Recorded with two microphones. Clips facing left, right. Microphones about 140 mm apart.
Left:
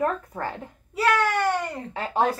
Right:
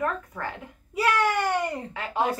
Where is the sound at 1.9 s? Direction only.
35° left (ahead or behind).